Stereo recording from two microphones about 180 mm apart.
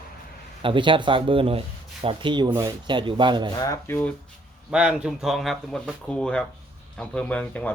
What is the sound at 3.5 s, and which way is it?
Speech, 20° left (ahead or behind).